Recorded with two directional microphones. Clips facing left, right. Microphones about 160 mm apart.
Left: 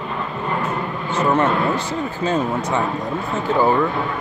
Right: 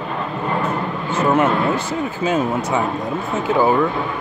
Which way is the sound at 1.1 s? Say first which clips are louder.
Right 1 dB; 5° right (ahead or behind).